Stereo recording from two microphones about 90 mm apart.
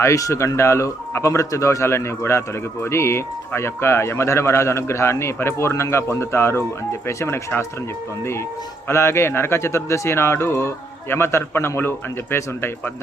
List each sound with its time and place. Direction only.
0.0 s speech: 35° left (ahead or behind)